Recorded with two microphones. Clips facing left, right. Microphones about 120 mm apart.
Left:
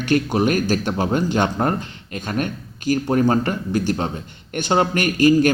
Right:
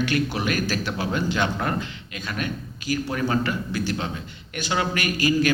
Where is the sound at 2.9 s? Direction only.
45° left (ahead or behind).